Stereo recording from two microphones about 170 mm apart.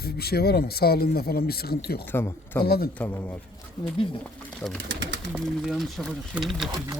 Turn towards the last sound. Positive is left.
turn(degrees=0)  # may be behind; listen again after turning